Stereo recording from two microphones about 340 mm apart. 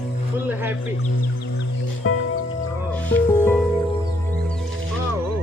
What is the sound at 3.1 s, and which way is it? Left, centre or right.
Music, centre.